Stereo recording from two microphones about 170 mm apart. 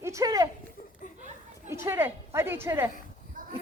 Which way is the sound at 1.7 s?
15° right (ahead or behind).